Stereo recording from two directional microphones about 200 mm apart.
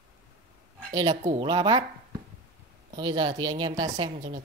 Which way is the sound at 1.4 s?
25° right (ahead or behind).